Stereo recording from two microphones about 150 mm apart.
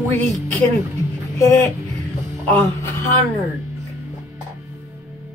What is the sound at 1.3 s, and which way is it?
Speech, 15° left (ahead or behind).